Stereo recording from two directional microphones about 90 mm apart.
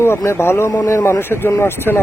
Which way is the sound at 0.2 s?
30° left (ahead or behind).